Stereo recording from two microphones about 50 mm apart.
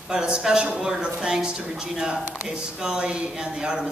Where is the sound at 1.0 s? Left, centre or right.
Centre.